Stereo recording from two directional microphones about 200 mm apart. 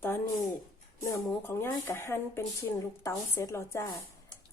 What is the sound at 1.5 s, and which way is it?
Speech, 10° left (ahead or behind).